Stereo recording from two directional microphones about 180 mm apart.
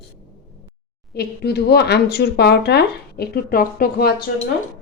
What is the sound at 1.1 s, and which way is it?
Speech, 65° left (ahead or behind).